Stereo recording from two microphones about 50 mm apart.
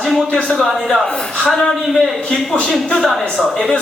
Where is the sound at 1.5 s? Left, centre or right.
Centre.